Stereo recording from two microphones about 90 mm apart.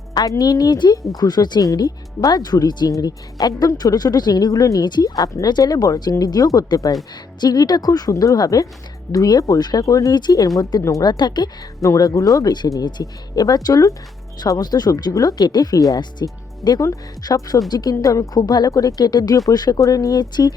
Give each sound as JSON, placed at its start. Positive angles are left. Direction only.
{"t": 0.1, "sound": "speech", "side_deg": 45}
{"t": 4.9, "sound": "speech", "side_deg": 55}
{"t": 16.8, "sound": "speech", "side_deg": 40}